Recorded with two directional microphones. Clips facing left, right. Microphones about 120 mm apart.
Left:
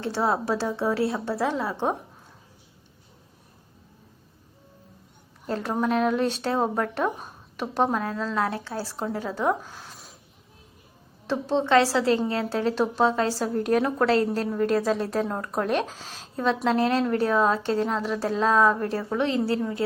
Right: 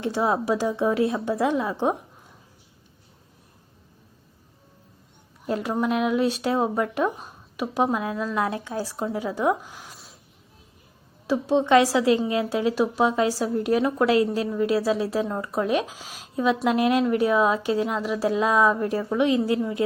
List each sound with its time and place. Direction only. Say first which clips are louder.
0.0 s speech: right 2 dB; 15° right (ahead or behind)
5.5 s speech: right 1 dB; 10° right (ahead or behind)
11.3 s speech: right 3 dB; 10° right (ahead or behind)